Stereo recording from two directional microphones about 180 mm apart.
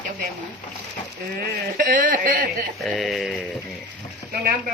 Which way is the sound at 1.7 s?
50° right (ahead or behind).